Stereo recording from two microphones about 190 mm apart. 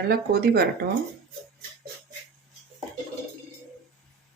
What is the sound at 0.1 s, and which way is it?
Speech, 55° right (ahead or behind).